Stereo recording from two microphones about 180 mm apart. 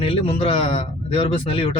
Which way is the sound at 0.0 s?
30° left (ahead or behind).